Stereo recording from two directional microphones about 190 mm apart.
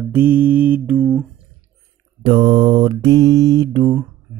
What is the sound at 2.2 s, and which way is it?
Mantra, 25° right (ahead or behind).